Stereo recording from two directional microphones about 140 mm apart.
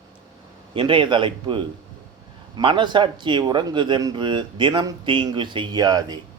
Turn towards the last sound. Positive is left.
turn(degrees=-30)  # may be behind; listen again after turning